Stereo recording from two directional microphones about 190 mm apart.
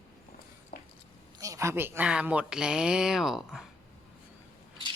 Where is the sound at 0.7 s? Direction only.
50° left (ahead or behind).